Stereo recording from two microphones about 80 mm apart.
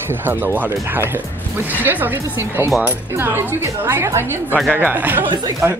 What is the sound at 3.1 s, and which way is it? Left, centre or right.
A woman's voice, right.